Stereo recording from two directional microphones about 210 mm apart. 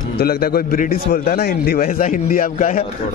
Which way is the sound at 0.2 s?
45° left (ahead or behind).